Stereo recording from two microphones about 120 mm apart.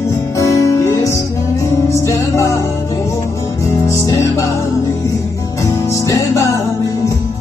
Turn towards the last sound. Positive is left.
turn(degrees=25)  # may be behind; listen again after turning